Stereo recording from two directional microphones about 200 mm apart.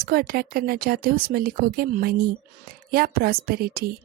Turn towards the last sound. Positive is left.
turn(degrees=-50)  # may be behind; listen again after turning